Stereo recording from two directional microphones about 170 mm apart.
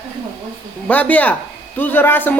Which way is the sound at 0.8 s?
10° left (ahead or behind).